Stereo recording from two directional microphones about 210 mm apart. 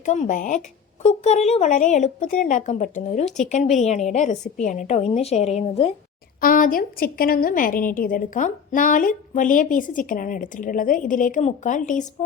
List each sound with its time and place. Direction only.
0.0 s a woman's voice: 35° left (ahead or behind)
6.4 s a woman's voice: 40° left (ahead or behind)